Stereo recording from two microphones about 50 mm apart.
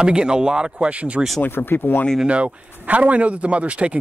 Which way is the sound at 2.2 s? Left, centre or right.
Right.